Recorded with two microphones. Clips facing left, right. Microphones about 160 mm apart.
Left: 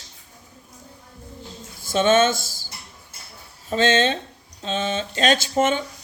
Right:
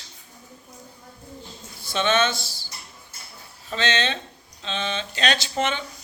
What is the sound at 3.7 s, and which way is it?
Speech, 45° left (ahead or behind).